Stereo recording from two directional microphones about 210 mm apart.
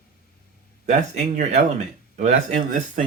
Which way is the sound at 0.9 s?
35° right (ahead or behind).